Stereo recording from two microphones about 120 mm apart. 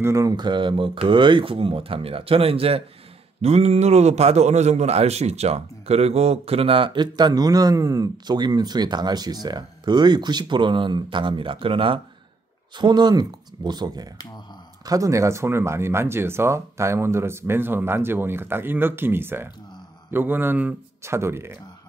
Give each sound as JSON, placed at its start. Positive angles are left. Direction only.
{"t": 0.0, "sound": "a man's voice", "side_deg": -25}
{"t": 12.7, "sound": "a man's voice", "side_deg": -35}